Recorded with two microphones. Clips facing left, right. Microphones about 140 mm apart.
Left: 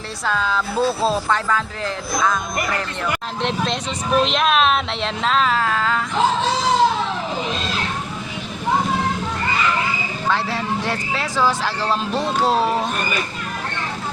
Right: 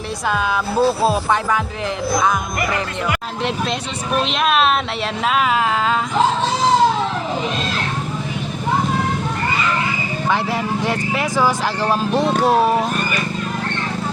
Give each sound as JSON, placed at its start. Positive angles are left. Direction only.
{"t": 0.3, "sound": "speech", "side_deg": -15}
{"t": 4.2, "sound": "speech", "side_deg": 0}
{"t": 10.2, "sound": "speech", "side_deg": -15}